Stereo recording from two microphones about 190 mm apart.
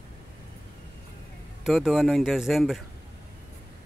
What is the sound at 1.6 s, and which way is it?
Speech, centre (ahead or behind).